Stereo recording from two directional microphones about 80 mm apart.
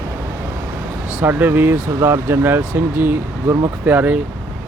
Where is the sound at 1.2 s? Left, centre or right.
Right.